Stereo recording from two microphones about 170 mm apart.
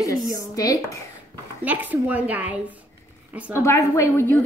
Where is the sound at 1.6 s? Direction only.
10° right (ahead or behind).